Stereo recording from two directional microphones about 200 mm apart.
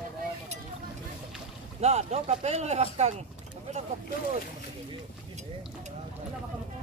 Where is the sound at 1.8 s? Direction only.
35° right (ahead or behind).